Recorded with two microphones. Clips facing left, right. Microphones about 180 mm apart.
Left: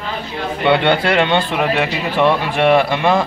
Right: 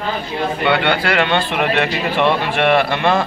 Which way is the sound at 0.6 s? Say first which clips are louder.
Left 4 dB; 20° left (ahead or behind).